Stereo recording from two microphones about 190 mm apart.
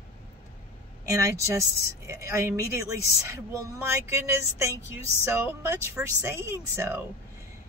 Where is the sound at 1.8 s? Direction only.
15° right (ahead or behind).